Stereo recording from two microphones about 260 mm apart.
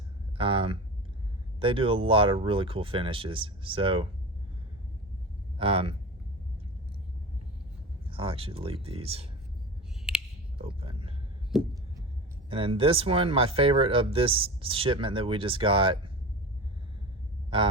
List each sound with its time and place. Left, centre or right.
0.3 s a sound: right
1.5 s speech: centre
5.5 s speech: right
8.0 s speech: right
10.6 s a sound: right
12.5 s speech: right